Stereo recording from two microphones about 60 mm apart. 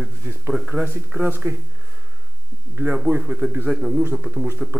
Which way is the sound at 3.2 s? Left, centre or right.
Centre.